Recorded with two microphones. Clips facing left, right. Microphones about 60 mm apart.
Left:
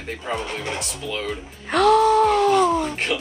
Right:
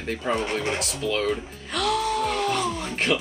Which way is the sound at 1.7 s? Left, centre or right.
Left.